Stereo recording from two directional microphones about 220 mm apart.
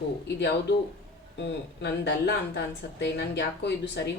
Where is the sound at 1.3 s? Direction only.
50° left (ahead or behind).